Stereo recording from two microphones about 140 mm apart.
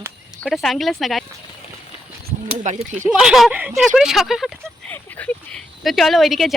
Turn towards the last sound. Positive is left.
turn(degrees=0)  # may be behind; listen again after turning